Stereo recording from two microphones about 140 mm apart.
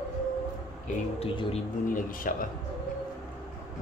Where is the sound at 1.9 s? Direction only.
75° left (ahead or behind).